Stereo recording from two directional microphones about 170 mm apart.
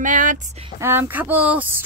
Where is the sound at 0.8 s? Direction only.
10° right (ahead or behind).